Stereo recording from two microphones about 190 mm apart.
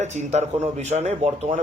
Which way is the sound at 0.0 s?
35° right (ahead or behind).